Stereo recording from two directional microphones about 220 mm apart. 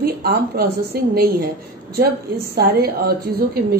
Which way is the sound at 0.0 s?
45° right (ahead or behind).